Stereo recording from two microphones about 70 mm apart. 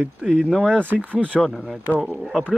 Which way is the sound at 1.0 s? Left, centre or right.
Right.